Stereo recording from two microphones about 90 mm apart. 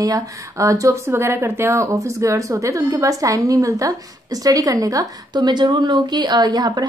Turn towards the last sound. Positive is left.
turn(degrees=-50)  # may be behind; listen again after turning